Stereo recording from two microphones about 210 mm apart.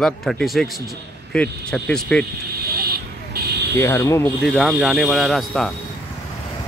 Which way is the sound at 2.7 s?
45° right (ahead or behind).